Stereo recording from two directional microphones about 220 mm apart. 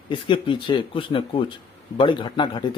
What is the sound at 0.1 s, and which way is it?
A man's voice, 20° left (ahead or behind).